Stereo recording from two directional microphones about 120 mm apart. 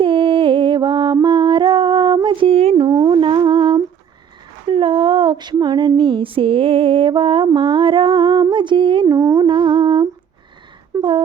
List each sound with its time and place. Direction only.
0.0 s music: 45° right (ahead or behind)
2.7 s a sound: 35° right (ahead or behind)
4.6 s female singing: 45° right (ahead or behind)
6.0 s mantra: 45° right (ahead or behind)
8.4 s music: 40° right (ahead or behind)
9.0 s music: 25° right (ahead or behind)
9.5 s humming: 40° right (ahead or behind)
10.9 s wail: 25° right (ahead or behind)